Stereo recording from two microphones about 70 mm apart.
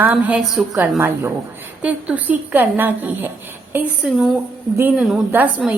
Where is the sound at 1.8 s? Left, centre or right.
Centre.